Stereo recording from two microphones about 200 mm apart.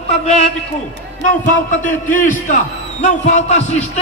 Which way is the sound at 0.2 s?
35° left (ahead or behind).